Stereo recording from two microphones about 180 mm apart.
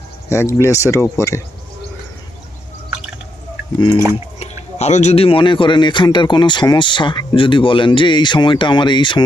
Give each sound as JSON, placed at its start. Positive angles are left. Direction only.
{"t": 0.3, "sound": "speech", "side_deg": 15}
{"t": 4.1, "sound": "speech", "side_deg": 35}